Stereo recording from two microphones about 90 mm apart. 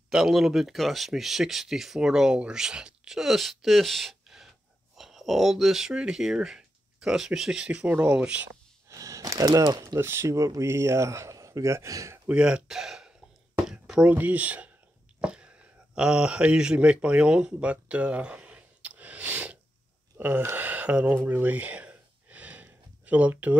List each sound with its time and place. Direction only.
0.1 s speech: 5° right (ahead or behind)
8.8 s a sound: 40° right (ahead or behind)
9.9 s speech: 25° right (ahead or behind)
12.3 s speech: 10° right (ahead or behind)
13.7 s a sound: 10° right (ahead or behind)
14.1 s speech: 20° right (ahead or behind)
15.1 s a sound: 10° right (ahead or behind)
20.2 s speech: 20° right (ahead or behind)
20.5 s gasp: 20° right (ahead or behind)